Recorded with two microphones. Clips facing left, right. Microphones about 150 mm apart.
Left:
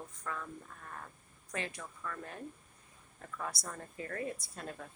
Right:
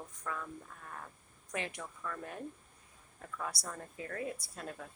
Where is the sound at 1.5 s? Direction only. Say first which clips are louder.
Right 1 dB; 15° right (ahead or behind).